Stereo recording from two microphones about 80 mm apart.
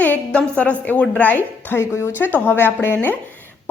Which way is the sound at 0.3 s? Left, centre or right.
Centre.